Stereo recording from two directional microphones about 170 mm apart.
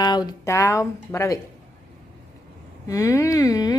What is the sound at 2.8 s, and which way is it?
Speech, 20° left (ahead or behind).